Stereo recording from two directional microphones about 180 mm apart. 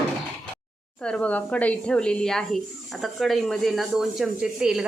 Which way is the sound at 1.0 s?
5° left (ahead or behind).